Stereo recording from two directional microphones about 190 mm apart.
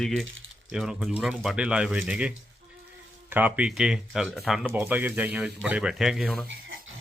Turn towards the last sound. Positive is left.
turn(degrees=0)  # may be behind; listen again after turning